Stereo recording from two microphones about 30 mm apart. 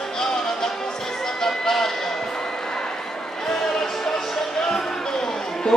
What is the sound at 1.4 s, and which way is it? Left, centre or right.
Music, centre.